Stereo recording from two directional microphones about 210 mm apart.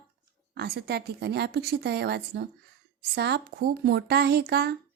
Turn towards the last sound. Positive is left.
turn(degrees=-50)  # may be behind; listen again after turning